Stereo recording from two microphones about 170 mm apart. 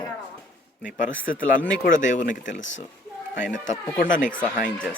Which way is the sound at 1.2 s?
55° left (ahead or behind).